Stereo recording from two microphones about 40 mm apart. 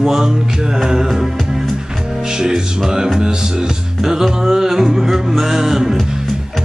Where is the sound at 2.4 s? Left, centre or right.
Centre.